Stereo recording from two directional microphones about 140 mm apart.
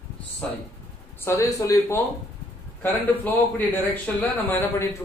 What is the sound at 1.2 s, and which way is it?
Speech, 20° left (ahead or behind).